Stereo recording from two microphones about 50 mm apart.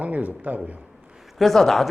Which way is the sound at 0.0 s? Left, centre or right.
Right.